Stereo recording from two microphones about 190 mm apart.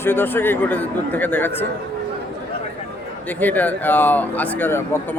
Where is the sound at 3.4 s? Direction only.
10° left (ahead or behind).